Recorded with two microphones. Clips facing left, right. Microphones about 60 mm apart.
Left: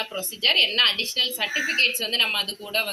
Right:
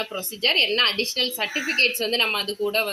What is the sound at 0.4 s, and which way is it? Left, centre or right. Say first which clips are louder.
A woman's voice: right 1 dB; right.